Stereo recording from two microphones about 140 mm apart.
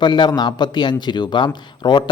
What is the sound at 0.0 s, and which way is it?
Speech, 30° left (ahead or behind).